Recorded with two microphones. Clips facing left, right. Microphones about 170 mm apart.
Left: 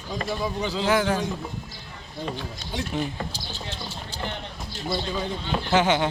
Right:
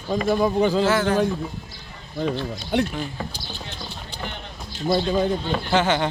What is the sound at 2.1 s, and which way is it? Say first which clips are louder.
Speech: right 7 dB; 65° right (ahead or behind).